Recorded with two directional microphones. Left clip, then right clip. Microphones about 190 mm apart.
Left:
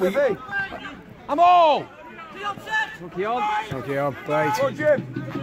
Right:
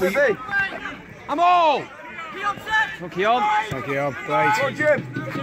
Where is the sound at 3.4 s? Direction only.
55° left (ahead or behind).